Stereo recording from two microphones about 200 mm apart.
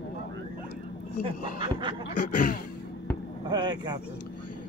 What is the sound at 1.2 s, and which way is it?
Speech, 25° right (ahead or behind).